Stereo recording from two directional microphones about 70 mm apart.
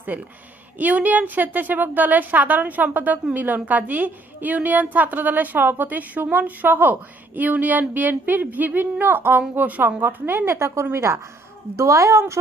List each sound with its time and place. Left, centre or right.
0.1 s a woman's voice: right